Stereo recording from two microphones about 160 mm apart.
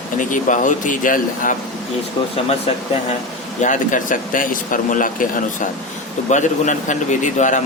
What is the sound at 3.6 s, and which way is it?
Speech, 50° left (ahead or behind).